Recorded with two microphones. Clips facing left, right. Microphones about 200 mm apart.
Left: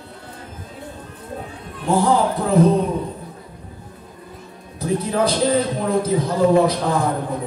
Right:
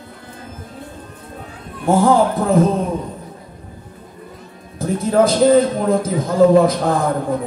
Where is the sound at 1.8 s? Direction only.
45° right (ahead or behind).